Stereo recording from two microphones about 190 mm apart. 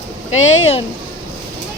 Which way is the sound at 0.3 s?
35° left (ahead or behind).